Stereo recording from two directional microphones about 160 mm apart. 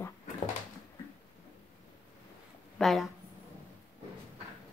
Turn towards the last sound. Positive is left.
turn(degrees=0)  # may be behind; listen again after turning